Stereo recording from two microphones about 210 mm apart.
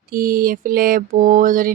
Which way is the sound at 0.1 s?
45° right (ahead or behind).